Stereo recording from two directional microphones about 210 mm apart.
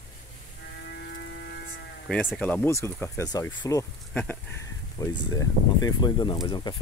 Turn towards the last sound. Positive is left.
turn(degrees=20)  # may be behind; listen again after turning